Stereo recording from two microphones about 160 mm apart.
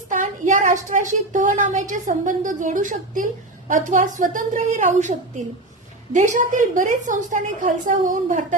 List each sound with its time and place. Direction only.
0.1 s a woman's voice: 55° right (ahead or behind)